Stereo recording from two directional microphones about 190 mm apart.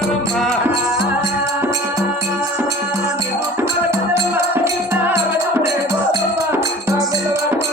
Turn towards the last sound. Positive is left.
turn(degrees=-15)  # may be behind; listen again after turning